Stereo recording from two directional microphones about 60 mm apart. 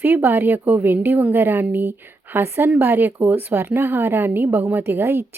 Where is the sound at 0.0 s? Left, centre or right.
Right.